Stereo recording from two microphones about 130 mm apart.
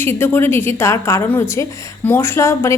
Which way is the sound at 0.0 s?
20° left (ahead or behind).